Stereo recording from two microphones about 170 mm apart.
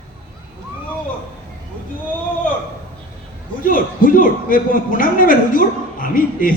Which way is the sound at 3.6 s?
55° left (ahead or behind).